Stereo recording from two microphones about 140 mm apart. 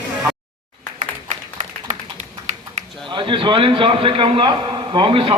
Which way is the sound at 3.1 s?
35° right (ahead or behind).